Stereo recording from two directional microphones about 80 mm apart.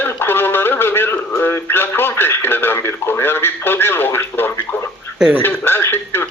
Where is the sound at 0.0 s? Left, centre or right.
Left.